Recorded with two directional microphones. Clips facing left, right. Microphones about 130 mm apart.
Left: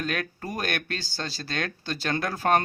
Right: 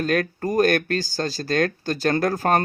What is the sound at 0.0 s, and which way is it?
Speech, 45° right (ahead or behind).